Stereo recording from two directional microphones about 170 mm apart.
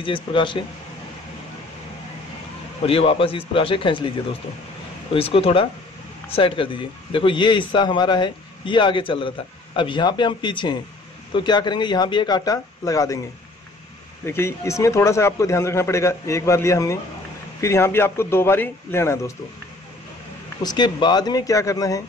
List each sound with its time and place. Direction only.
0.0 s a man's voice: 30° left (ahead or behind)
2.8 s a man's voice: 35° left (ahead or behind)
14.2 s a man's voice: 15° left (ahead or behind)
20.6 s a man's voice: 25° left (ahead or behind)